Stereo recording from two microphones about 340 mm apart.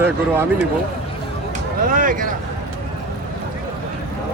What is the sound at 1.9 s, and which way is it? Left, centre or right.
Speech, right.